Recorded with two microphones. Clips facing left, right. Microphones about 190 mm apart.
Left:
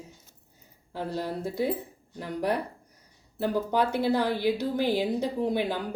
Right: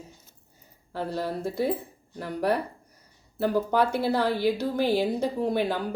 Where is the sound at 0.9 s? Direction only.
15° left (ahead or behind).